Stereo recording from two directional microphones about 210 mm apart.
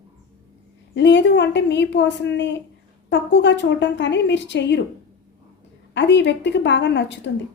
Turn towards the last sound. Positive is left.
turn(degrees=55)  # may be behind; listen again after turning